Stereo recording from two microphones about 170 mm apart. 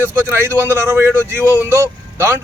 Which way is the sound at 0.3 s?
15° right (ahead or behind).